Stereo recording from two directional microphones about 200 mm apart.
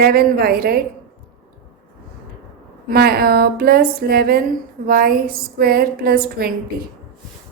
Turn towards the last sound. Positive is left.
turn(degrees=-50)  # may be behind; listen again after turning